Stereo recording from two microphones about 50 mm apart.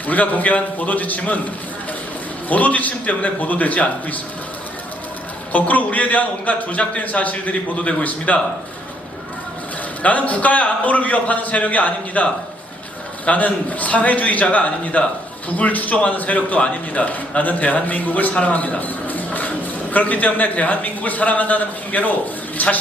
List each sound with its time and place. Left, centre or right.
0.1 s a man's voice: left
2.5 s a man's voice: left
5.5 s a man's voice: left
10.0 s a man's voice: left